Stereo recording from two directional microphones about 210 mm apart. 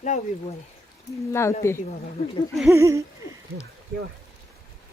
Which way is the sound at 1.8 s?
25° left (ahead or behind).